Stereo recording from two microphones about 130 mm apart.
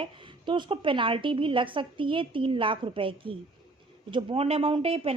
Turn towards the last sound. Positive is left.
turn(degrees=-45)  # may be behind; listen again after turning